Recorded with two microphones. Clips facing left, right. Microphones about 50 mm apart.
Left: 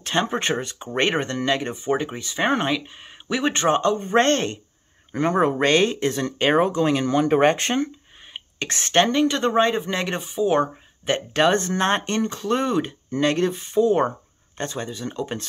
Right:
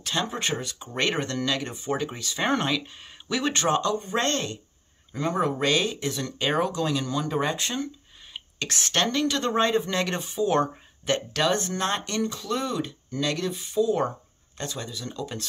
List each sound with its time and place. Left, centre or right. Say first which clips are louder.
0.0 s speech: left 5 dB; left
8.3 s speech: left 3 dB; left
11.1 s speech: left 7 dB; left